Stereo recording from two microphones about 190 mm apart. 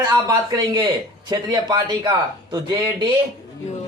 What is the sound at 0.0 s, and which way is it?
Speech, 20° right (ahead or behind).